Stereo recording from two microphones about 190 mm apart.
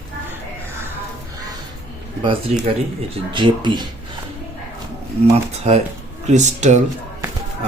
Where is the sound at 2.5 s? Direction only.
35° right (ahead or behind).